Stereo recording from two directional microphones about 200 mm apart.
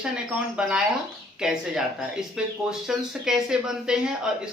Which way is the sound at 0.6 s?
5° right (ahead or behind).